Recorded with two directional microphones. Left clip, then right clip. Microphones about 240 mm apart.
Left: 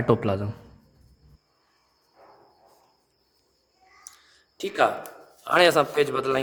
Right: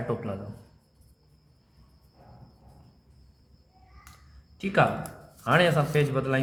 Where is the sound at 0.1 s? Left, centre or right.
Left.